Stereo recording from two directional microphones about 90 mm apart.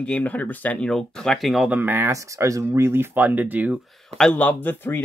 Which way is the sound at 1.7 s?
20° right (ahead or behind).